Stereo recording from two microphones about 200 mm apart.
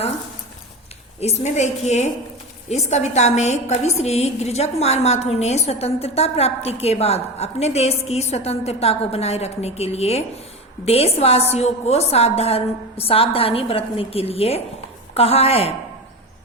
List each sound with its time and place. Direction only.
1.2 s a woman's voice: 35° left (ahead or behind)